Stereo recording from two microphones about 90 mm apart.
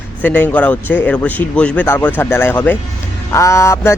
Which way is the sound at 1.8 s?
25° left (ahead or behind).